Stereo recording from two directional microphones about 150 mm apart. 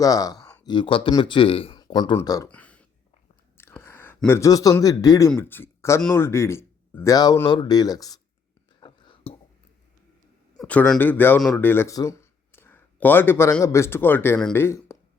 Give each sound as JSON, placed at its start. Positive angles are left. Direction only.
{"t": 0.0, "sound": "speech", "side_deg": 25}
{"t": 2.5, "sound": "a sound", "side_deg": 10}
{"t": 4.3, "sound": "speech", "side_deg": 20}
{"t": 8.8, "sound": "whispering", "side_deg": 30}
{"t": 10.6, "sound": "speech", "side_deg": 5}
{"t": 11.3, "sound": "speech", "side_deg": 5}
{"t": 11.6, "sound": "speech", "side_deg": 15}